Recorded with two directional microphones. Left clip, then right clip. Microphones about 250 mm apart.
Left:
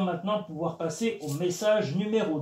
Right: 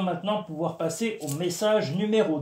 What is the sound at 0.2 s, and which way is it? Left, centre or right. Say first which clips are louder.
Speech: right 2 dB; right.